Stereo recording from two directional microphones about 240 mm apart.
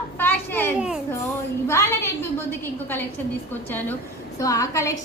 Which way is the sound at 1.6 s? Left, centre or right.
Centre.